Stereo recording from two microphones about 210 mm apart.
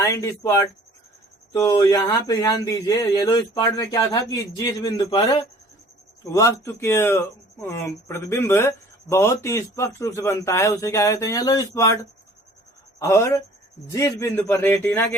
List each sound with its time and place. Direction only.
0.0 s speech: 15° left (ahead or behind)
13.0 s speech: 15° left (ahead or behind)